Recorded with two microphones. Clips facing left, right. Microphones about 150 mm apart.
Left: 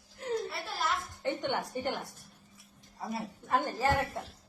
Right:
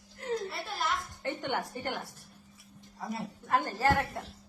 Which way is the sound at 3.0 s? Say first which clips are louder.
Even; 5° left (ahead or behind).